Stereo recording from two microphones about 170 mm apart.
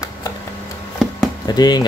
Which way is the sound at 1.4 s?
25° left (ahead or behind).